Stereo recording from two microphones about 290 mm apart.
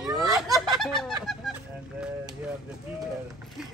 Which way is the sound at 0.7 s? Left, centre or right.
Centre.